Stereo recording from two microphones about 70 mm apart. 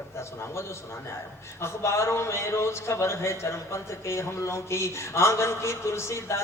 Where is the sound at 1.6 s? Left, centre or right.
Left.